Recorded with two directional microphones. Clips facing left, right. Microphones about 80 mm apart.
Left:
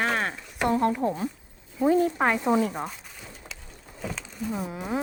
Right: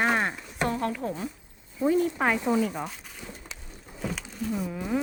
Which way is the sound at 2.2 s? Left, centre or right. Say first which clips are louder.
Left 2 dB; centre.